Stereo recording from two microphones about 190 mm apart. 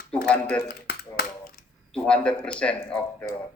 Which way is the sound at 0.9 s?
55° left (ahead or behind).